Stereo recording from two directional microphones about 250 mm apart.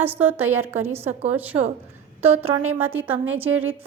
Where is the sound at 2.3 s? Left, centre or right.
Right.